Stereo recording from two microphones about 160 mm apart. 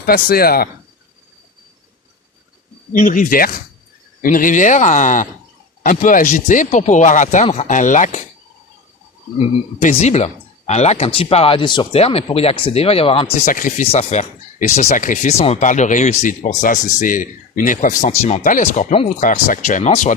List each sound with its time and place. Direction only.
0.0 s speech: 70° left (ahead or behind)
2.9 s speech: 55° left (ahead or behind)
9.4 s speech: 40° left (ahead or behind)
13.4 s speech: 55° left (ahead or behind)
13.9 s speech: 40° left (ahead or behind)